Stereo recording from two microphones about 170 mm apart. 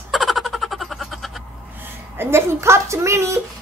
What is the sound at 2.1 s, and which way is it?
A woman's voice, 15° right (ahead or behind).